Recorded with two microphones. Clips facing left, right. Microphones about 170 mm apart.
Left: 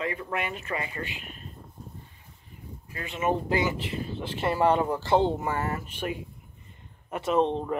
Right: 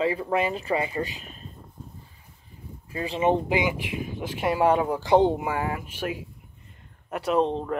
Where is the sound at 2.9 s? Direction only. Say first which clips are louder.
Right 5 dB; 30° right (ahead or behind).